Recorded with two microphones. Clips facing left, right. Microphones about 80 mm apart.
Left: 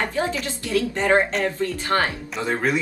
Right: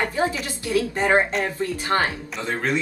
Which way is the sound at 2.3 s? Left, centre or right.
Centre.